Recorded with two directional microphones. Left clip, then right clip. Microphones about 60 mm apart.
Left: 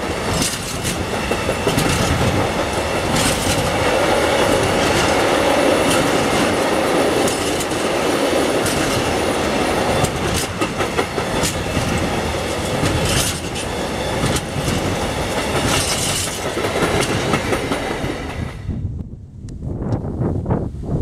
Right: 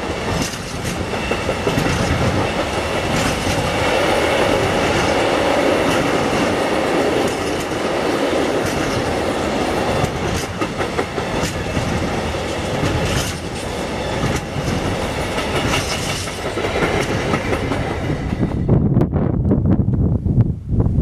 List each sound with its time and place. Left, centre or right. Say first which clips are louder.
1.3 s train: left 1 dB; left
3.2 s train: left 1 dB; left
3.7 s train: even; centre; by 7.3 s left
7.8 s train: even; left
10.6 s train: left 1 dB; left
16.7 s train: even; left